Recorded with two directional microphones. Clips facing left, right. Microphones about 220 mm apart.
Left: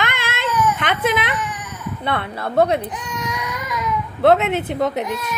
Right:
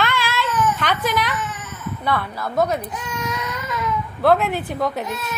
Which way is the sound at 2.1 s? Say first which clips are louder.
Left 5 dB; 25° left (ahead or behind).